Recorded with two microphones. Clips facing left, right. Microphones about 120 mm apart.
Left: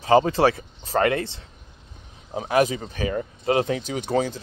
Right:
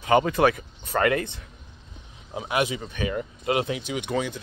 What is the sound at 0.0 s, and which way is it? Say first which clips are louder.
Speech: left 2 dB; 30° left (ahead or behind).